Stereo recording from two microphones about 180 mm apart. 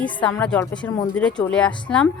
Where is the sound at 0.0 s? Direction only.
5° left (ahead or behind).